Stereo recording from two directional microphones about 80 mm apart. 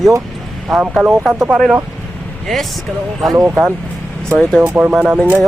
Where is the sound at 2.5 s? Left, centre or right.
Centre.